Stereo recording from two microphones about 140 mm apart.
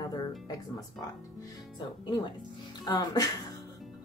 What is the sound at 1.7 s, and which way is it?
Speech, 30° left (ahead or behind).